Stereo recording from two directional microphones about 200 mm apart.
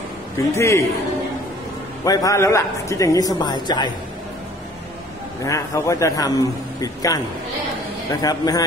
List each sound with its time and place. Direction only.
0.6 s a man's voice: 15° left (ahead or behind)
2.0 s a man's voice: 15° left (ahead or behind)
5.4 s a man's voice: 15° left (ahead or behind)